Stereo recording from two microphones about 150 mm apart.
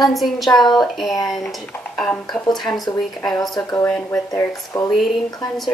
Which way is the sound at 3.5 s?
25° left (ahead or behind).